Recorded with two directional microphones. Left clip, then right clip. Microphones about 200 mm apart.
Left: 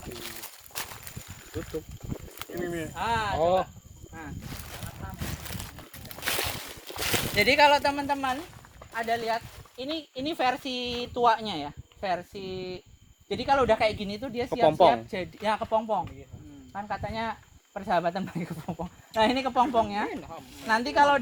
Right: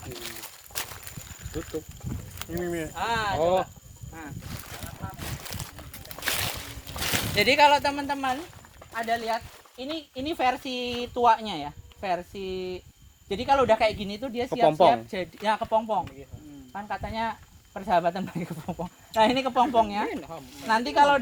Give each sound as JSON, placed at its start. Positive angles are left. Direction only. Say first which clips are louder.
{"t": 0.1, "sound": "a sound", "louder": "right 2 dB", "side_deg": -5}
{"t": 2.4, "sound": "speech", "louder": "right 2 dB", "side_deg": -5}
{"t": 5.2, "sound": "a sound", "louder": "even", "side_deg": 0}
{"t": 8.9, "sound": "speech", "louder": "right 1 dB", "side_deg": 30}
{"t": 20.1, "sound": "speech", "louder": "right 2 dB", "side_deg": -35}
{"t": 20.7, "sound": "speech", "louder": "right 1 dB", "side_deg": 20}